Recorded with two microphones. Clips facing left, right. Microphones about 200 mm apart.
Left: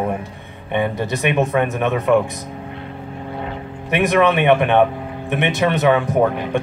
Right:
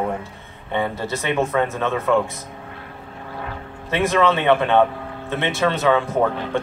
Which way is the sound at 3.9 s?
15° left (ahead or behind).